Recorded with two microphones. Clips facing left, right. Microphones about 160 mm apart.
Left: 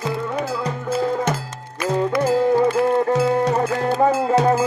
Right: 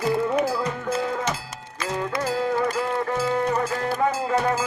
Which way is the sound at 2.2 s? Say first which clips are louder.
Left 7 dB; 55° left (ahead or behind).